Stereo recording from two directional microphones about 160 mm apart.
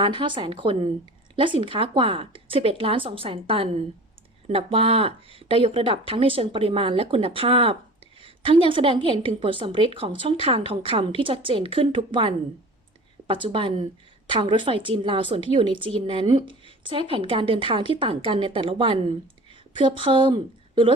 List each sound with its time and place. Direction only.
0.0 s speech: 30° right (ahead or behind)